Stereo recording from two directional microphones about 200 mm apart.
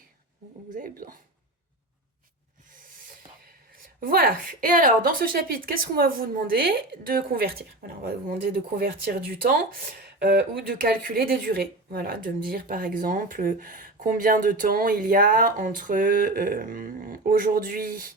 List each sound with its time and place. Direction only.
0.8 s speech: 45° right (ahead or behind)
4.0 s speech: 45° right (ahead or behind)